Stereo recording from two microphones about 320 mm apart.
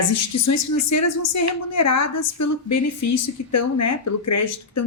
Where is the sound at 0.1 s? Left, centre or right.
Left.